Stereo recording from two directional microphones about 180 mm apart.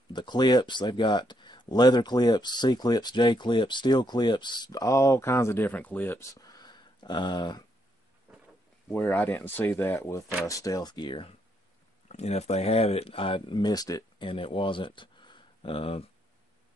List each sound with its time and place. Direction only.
0.1 s speech: 25° left (ahead or behind)
8.3 s a sound: 10° right (ahead or behind)
8.9 s speech: 10° left (ahead or behind); by 16.1 s 30° left (ahead or behind)